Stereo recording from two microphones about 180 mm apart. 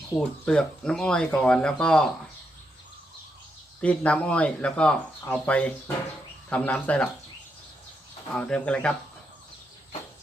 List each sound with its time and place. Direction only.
0.2 s speech: 5° left (ahead or behind)
3.8 s speech: 5° left (ahead or behind)
8.3 s speech: 5° left (ahead or behind)